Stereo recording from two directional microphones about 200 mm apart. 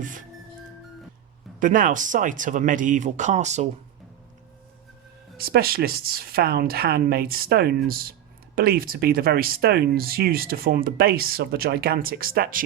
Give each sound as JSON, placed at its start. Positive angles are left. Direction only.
{"t": 0.0, "sound": "music", "side_deg": -40}
{"t": 1.5, "sound": "speech", "side_deg": -40}
{"t": 5.4, "sound": "speech", "side_deg": -50}